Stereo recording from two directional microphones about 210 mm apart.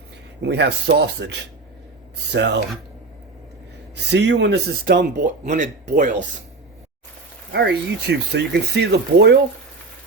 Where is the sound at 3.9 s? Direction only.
55° right (ahead or behind).